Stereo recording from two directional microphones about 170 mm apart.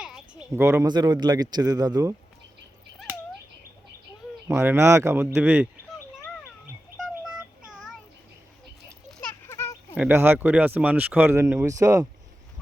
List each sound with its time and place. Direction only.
0.0 s a sound: 5° right (ahead or behind)
0.6 s a man's voice: 15° right (ahead or behind)
4.4 s speech: 15° right (ahead or behind)
7.0 s child singing: 5° right (ahead or behind)
9.5 s a sound: 20° left (ahead or behind)
9.9 s a man's voice: 10° right (ahead or behind)